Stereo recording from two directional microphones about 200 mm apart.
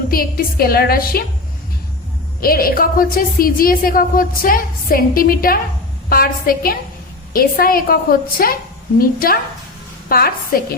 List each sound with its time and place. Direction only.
0.1 s a woman's voice: 45° left (ahead or behind)
2.4 s a woman's voice: 45° left (ahead or behind)